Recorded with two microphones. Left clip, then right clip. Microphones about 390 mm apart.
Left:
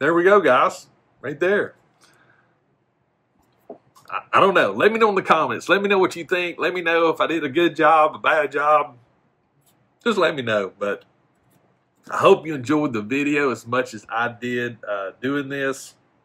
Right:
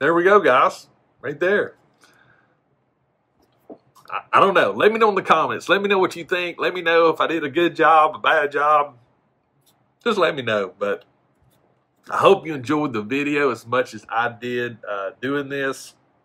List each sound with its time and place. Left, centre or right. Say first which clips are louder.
0.0 s speech: even; centre
4.0 s a man's voice: right 1 dB; centre
10.0 s a man's voice: even; centre